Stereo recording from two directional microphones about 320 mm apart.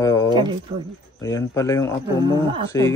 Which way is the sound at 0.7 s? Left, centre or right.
Centre.